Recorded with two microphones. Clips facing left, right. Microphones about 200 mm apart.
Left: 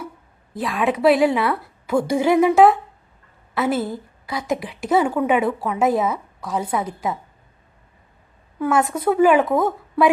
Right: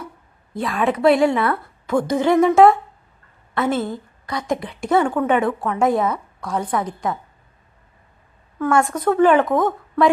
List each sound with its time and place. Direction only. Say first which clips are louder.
0.5 s a woman's voice: right 1 dB; centre (ahead or behind)
8.5 s a woman's voice: right 1 dB; 10° left (ahead or behind)